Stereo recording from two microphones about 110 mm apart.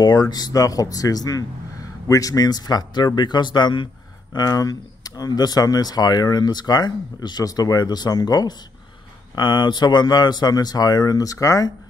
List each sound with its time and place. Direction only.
0.0 s speech: 35° left (ahead or behind)